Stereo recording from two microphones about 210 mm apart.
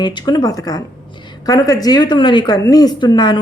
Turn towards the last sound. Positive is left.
turn(degrees=20)  # may be behind; listen again after turning